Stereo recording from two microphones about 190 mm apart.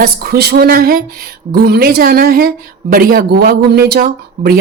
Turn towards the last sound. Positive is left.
turn(degrees=-55)  # may be behind; listen again after turning